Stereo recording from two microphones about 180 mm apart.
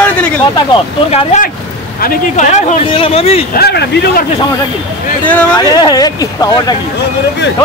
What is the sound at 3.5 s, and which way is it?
Speech, 65° left (ahead or behind).